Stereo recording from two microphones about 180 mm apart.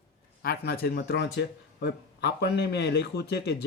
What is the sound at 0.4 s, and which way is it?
Speech, 60° left (ahead or behind).